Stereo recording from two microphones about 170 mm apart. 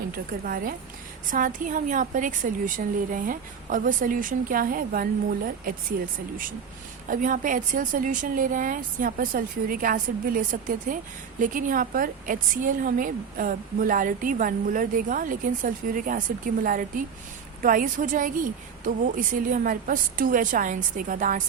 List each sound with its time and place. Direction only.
0.1 s a woman's voice: 55° right (ahead or behind)
7.1 s a woman's voice: 50° right (ahead or behind)